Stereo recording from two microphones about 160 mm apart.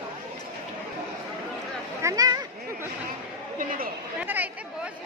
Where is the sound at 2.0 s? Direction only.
25° right (ahead or behind).